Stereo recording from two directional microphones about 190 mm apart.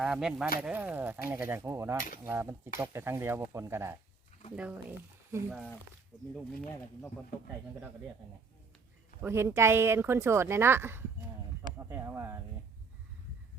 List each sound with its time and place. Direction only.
0.0 s a woman's voice: 5° right (ahead or behind)
9.2 s a woman's voice: 15° right (ahead or behind)